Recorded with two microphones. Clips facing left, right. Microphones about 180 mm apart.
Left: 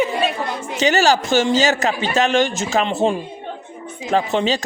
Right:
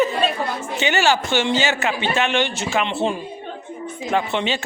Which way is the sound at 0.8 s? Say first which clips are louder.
Left 4 dB; 40° left (ahead or behind).